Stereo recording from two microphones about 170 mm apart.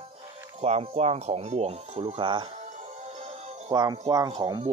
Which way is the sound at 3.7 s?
25° right (ahead or behind).